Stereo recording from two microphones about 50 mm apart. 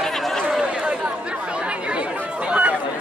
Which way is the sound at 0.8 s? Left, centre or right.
Right.